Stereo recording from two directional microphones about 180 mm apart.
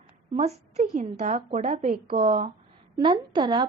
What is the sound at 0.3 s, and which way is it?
A woman's voice, 35° right (ahead or behind).